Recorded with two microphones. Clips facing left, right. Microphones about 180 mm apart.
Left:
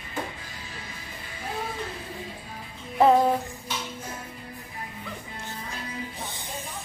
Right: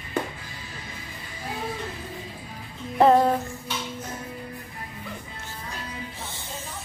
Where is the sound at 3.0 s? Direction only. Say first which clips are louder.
Right 1 dB; centre (ahead or behind).